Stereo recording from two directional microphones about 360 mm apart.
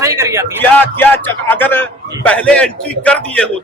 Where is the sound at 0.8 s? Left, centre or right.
Centre.